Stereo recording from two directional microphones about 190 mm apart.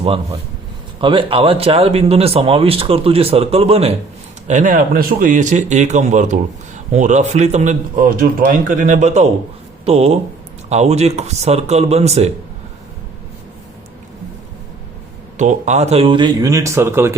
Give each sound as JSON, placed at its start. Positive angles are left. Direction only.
{"t": 1.0, "sound": "speech", "side_deg": -25}
{"t": 4.4, "sound": "speech", "side_deg": -40}
{"t": 15.4, "sound": "speech", "side_deg": -40}